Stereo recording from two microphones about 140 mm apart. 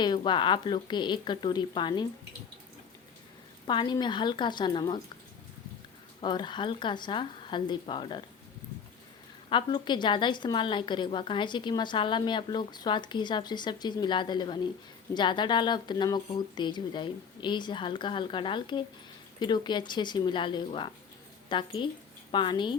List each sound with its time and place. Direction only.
0.0 s a woman's voice: 35° left (ahead or behind)
3.7 s a woman's voice: 35° left (ahead or behind)
6.2 s a woman's voice: 35° left (ahead or behind)
9.5 s a woman's voice: 35° left (ahead or behind)